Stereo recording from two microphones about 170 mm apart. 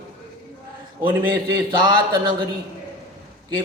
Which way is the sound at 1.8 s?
25° right (ahead or behind).